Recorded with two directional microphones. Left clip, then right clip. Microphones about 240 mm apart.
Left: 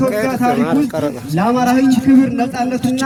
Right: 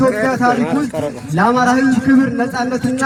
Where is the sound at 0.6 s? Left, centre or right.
Left.